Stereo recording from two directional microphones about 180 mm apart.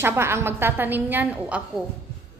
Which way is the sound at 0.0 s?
15° right (ahead or behind).